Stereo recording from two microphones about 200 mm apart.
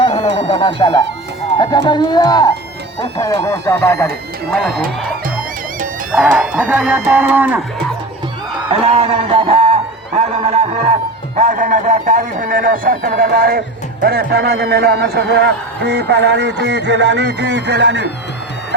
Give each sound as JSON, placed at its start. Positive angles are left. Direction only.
{"t": 0.0, "sound": "music", "side_deg": 30}
{"t": 0.3, "sound": "speech", "side_deg": 25}
{"t": 4.5, "sound": "speech", "side_deg": 0}
{"t": 6.1, "sound": "speech", "side_deg": -5}
{"t": 8.7, "sound": "speech", "side_deg": -30}
{"t": 10.2, "sound": "music", "side_deg": -35}
{"t": 11.3, "sound": "a man's voice", "side_deg": -40}